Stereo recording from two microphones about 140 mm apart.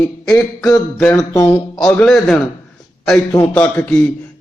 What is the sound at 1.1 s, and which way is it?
Speech, 25° left (ahead or behind).